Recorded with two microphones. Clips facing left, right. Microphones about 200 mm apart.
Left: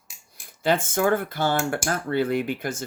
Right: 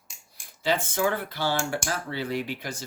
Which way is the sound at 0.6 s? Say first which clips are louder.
Left 4 dB; 50° left (ahead or behind).